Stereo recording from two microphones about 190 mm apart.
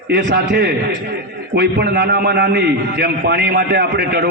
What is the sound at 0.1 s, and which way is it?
A man's voice, 65° right (ahead or behind).